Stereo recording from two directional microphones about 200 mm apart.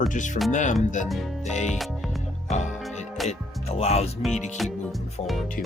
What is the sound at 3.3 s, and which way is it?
Speech, 30° left (ahead or behind).